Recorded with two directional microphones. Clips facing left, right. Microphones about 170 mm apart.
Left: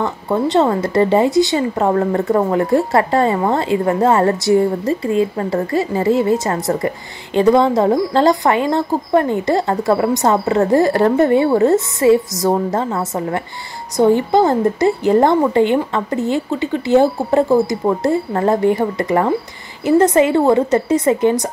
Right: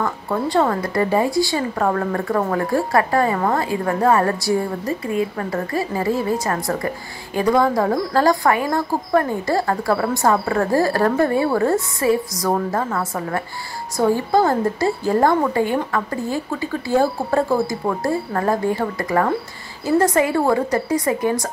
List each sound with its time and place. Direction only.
0.0 s speech: 25° left (ahead or behind)